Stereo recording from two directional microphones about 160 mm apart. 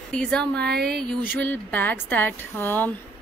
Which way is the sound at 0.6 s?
85° right.